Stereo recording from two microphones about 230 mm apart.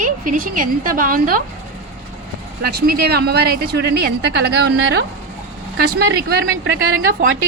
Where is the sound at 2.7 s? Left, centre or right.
Right.